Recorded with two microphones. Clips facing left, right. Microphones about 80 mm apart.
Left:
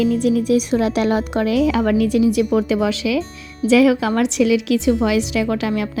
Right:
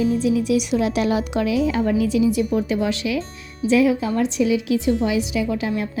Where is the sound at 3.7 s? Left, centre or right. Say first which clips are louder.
Left 4 dB; left.